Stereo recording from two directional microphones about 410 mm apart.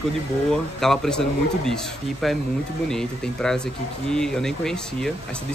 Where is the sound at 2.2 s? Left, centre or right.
Centre.